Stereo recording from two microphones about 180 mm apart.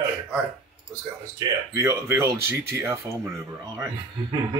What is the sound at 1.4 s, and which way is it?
Speech, 25° right (ahead or behind).